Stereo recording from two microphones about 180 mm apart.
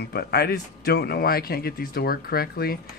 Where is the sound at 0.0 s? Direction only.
60° left (ahead or behind).